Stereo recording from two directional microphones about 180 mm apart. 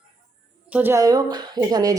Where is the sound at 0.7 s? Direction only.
10° right (ahead or behind).